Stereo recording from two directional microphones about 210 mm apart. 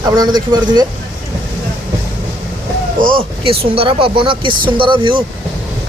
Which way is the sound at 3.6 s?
25° right (ahead or behind).